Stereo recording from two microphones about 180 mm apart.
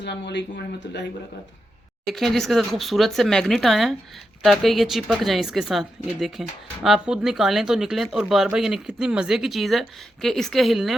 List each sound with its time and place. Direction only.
0.0 s speech: 70° left (ahead or behind)
2.0 s speech: centre (ahead or behind)